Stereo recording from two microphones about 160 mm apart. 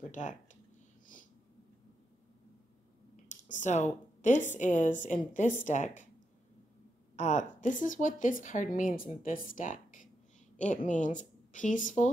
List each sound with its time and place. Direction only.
0.1 s speech: 50° left (ahead or behind)
3.3 s a woman's voice: 50° left (ahead or behind)
7.2 s a woman's voice: 50° left (ahead or behind)